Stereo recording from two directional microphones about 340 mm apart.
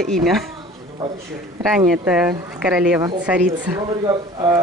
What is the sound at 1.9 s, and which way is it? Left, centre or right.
Speech, centre.